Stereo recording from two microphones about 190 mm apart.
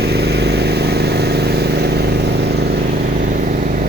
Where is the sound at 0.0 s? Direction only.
60° right (ahead or behind).